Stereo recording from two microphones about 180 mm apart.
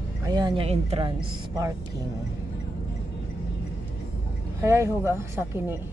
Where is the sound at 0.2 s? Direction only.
25° right (ahead or behind).